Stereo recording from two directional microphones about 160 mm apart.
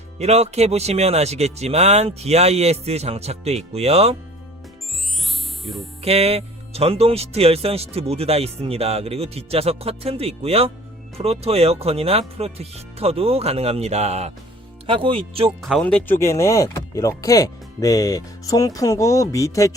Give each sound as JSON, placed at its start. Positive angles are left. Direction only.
{"t": 0.2, "sound": "speech", "side_deg": -40}
{"t": 6.0, "sound": "speech", "side_deg": -40}
{"t": 15.6, "sound": "speech", "side_deg": 5}